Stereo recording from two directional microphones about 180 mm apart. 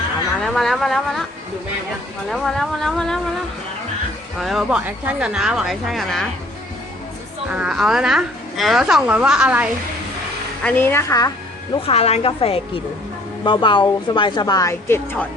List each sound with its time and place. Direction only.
0.4 s a woman's voice: centre (ahead or behind)
2.3 s a woman's voice: centre (ahead or behind)
4.4 s a woman's voice: centre (ahead or behind)
7.5 s a woman's voice: 5° right (ahead or behind)
10.6 s a woman's voice: 10° left (ahead or behind)
11.7 s a woman's voice: 35° left (ahead or behind); by 15.3 s 10° left (ahead or behind)